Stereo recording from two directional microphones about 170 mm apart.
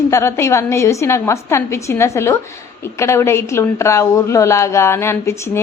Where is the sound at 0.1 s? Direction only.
15° left (ahead or behind).